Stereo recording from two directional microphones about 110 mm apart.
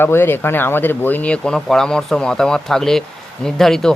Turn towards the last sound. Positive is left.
turn(degrees=5)  # may be behind; listen again after turning